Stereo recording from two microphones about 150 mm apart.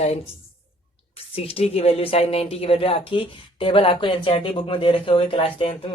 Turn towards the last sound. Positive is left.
turn(degrees=40)  # may be behind; listen again after turning